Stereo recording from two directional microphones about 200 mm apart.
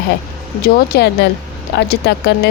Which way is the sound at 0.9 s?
55° left (ahead or behind).